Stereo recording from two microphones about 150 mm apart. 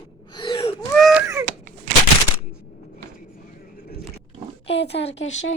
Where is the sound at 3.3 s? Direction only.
70° left (ahead or behind).